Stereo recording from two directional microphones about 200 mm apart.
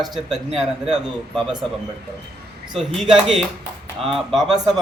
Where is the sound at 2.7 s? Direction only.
Centre (ahead or behind).